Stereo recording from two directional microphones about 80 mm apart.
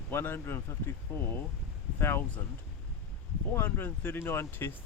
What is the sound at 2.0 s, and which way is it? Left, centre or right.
Speech, left.